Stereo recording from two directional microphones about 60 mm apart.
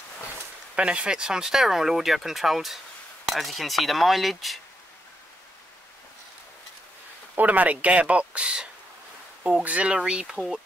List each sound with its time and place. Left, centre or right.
0.7 s speech: centre
7.3 s speech: right